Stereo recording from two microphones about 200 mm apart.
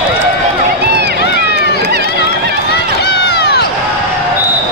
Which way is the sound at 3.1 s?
55° left (ahead or behind).